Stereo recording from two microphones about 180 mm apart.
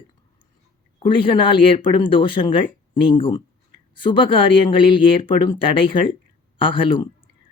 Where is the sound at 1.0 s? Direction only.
25° left (ahead or behind).